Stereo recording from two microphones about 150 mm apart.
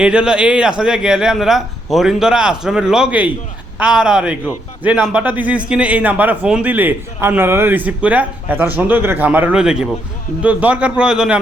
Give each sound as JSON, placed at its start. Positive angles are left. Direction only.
{"t": 0.0, "sound": "a man's voice", "side_deg": -5}